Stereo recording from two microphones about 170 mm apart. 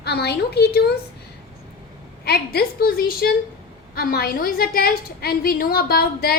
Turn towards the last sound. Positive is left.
turn(degrees=60)  # may be behind; listen again after turning